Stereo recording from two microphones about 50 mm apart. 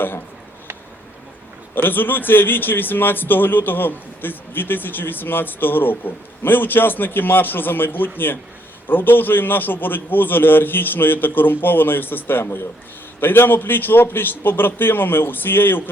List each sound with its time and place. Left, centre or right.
1.7 s speech: left